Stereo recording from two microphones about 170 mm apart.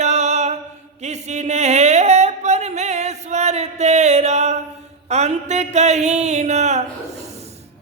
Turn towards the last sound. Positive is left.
turn(degrees=-40)  # may be behind; listen again after turning